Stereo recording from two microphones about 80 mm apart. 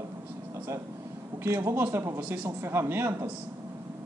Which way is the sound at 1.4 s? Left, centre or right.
Right.